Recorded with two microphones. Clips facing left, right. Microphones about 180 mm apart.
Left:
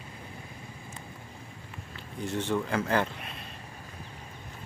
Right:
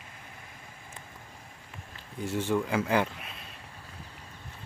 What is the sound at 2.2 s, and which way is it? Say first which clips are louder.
Speech: right 1 dB; 10° right (ahead or behind).